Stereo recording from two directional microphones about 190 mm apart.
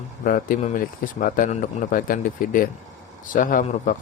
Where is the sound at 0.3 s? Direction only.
45° left (ahead or behind).